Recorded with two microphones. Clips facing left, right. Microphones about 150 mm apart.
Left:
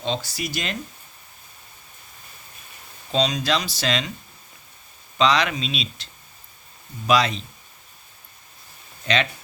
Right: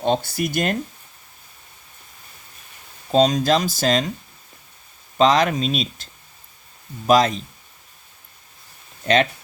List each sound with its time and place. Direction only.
0.0 s speech: 55° right (ahead or behind)
3.1 s speech: 45° right (ahead or behind)
5.1 s speech: 45° right (ahead or behind)
7.1 s speech: 45° right (ahead or behind)
9.1 s speech: 50° right (ahead or behind)